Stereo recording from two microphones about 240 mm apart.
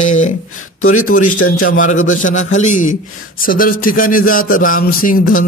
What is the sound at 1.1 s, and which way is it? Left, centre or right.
A man's voice, left.